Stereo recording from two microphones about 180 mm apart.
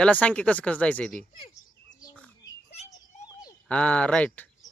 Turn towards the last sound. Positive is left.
turn(degrees=5)  # may be behind; listen again after turning